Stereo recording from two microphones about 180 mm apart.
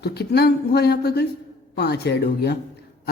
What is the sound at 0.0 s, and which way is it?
A woman's voice, 65° left (ahead or behind).